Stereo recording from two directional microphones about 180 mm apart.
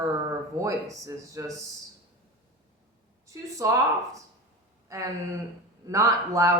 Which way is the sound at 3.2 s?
15° right (ahead or behind).